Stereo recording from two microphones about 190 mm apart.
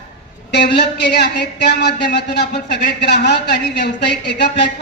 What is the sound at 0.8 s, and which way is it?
Speech, 60° left (ahead or behind).